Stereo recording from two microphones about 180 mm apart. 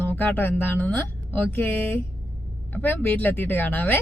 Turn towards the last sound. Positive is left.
turn(degrees=10)  # may be behind; listen again after turning